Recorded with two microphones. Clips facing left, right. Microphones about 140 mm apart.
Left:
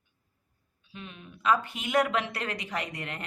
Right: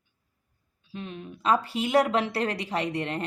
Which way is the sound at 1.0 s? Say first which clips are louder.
Right 5 dB; 35° right (ahead or behind).